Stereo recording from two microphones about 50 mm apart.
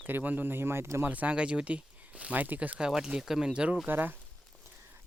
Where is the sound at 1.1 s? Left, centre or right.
Right.